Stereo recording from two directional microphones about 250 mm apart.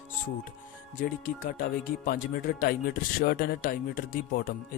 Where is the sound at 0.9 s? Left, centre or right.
Left.